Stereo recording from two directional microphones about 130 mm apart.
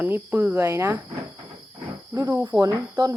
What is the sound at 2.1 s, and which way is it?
Speech, 25° right (ahead or behind).